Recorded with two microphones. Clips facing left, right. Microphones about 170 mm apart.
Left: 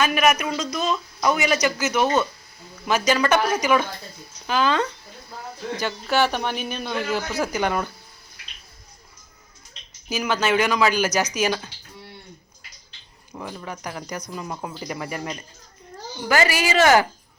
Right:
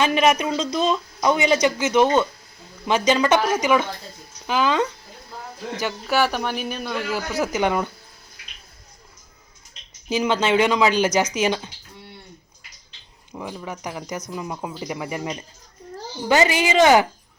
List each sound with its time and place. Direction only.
0.0 s speech: 25° right (ahead or behind); by 7.2 s 5° right (ahead or behind)
7.4 s speech: 20° right (ahead or behind)
10.1 s speech: 25° right (ahead or behind)
13.3 s speech: 10° right (ahead or behind)